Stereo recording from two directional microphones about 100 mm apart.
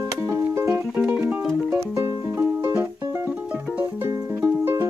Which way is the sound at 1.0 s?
15° right (ahead or behind).